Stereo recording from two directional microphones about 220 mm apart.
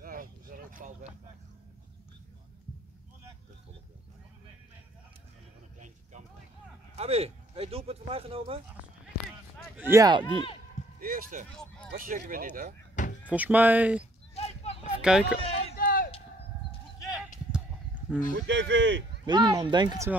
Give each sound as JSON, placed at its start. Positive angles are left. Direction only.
{"t": 0.0, "sound": "a sound", "side_deg": -40}
{"t": 7.0, "sound": "speech", "side_deg": -30}
{"t": 9.8, "sound": "speech", "side_deg": -10}
{"t": 10.2, "sound": "speech", "side_deg": 20}
{"t": 11.0, "sound": "speech", "side_deg": -40}
{"t": 13.0, "sound": "door", "side_deg": 35}
{"t": 13.3, "sound": "speech", "side_deg": -5}
{"t": 14.3, "sound": "a sound", "side_deg": 30}
{"t": 15.0, "sound": "speech", "side_deg": -5}
{"t": 15.3, "sound": "a sound", "side_deg": 25}
{"t": 15.7, "sound": "a sound", "side_deg": 40}
{"t": 18.3, "sound": "speech", "side_deg": -55}
{"t": 19.2, "sound": "speech", "side_deg": -20}